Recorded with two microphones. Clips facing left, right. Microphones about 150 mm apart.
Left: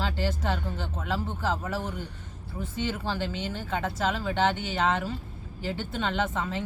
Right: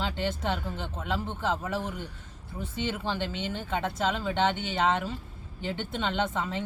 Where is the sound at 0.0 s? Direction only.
20° right (ahead or behind).